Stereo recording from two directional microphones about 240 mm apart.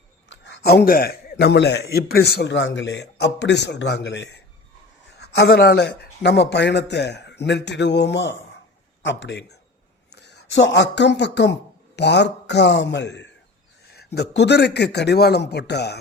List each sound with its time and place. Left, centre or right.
0.3 s a man's voice: left